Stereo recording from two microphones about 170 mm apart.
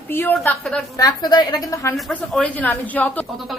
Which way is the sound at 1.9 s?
5° left (ahead or behind).